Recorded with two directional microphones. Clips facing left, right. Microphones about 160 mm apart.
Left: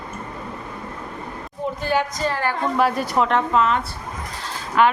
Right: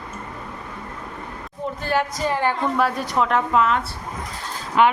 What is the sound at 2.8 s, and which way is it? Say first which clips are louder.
A woman's voice: left 2 dB; 5° left (ahead or behind).